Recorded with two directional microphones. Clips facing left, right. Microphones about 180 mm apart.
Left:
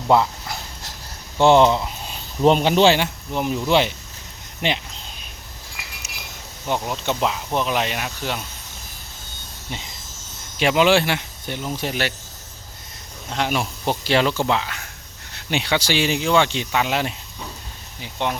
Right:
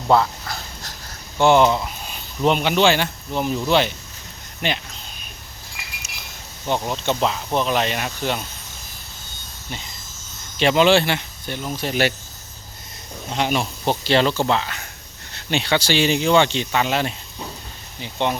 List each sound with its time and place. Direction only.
0.1 s dog: 15° left (ahead or behind)
1.5 s speech: 25° left (ahead or behind)
6.7 s speech: 5° left (ahead or behind)
9.6 s speech: 20° left (ahead or behind)
10.6 s speech: 10° left (ahead or behind)
13.3 s speech: 5° left (ahead or behind)